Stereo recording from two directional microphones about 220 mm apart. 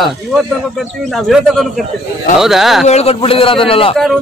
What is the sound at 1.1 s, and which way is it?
A man's voice, centre (ahead or behind).